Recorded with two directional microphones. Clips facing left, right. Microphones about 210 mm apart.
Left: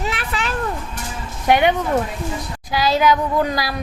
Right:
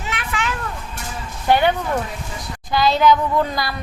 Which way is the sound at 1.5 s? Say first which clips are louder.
Left 1 dB; 15° left (ahead or behind).